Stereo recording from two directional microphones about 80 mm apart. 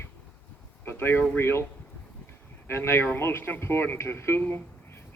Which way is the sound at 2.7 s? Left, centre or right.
Left.